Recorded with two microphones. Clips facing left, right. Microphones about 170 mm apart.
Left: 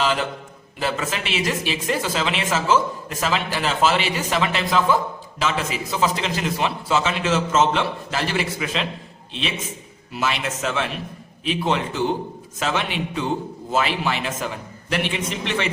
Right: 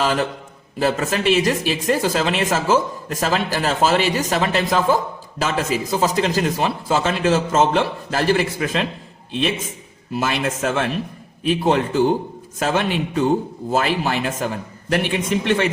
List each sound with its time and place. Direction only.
0.0 s a man's voice: 45° right (ahead or behind)
10.1 s speech: 45° right (ahead or behind)